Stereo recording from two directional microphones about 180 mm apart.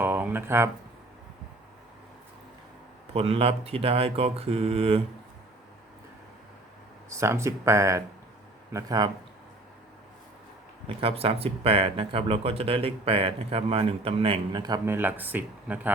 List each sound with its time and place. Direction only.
0.0 s a sound: 10° right (ahead or behind)
3.1 s speech: 35° right (ahead or behind)
7.1 s speech: 15° right (ahead or behind)
10.8 s speech: 30° right (ahead or behind); by 15.9 s 10° right (ahead or behind)